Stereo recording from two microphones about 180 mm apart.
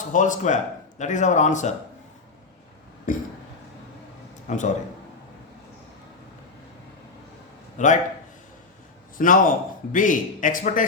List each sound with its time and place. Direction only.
0.1 s a man's voice: 45° left (ahead or behind)
3.1 s a man's voice: 45° left (ahead or behind)
4.4 s speech: 45° left (ahead or behind)
7.8 s a man's voice: 45° left (ahead or behind)
9.1 s a man's voice: 50° left (ahead or behind)